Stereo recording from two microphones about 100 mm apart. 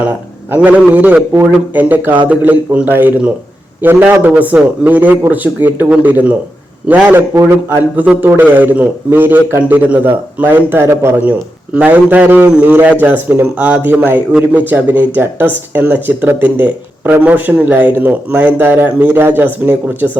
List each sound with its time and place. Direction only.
0.5 s a man's voice: 15° right (ahead or behind)
11.7 s speech: 15° right (ahead or behind)